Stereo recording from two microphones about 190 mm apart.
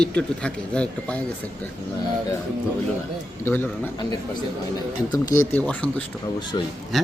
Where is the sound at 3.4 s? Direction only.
10° left (ahead or behind).